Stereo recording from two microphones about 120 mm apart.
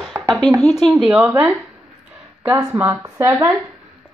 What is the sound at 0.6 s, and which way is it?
Speech, 5° left (ahead or behind).